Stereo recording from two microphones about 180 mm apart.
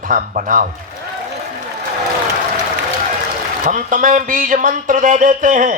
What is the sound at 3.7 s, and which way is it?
A man's voice, 45° right (ahead or behind).